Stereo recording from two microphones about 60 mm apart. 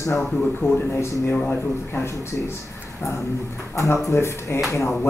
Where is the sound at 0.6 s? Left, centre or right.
Left.